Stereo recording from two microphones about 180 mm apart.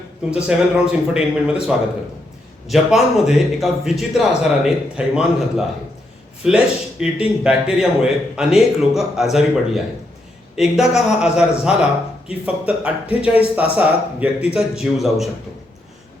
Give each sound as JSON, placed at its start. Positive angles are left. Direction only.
{"t": 0.3, "sound": "a man's voice", "side_deg": -5}